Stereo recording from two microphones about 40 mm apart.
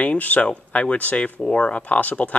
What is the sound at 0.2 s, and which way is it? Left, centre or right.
Speech, left.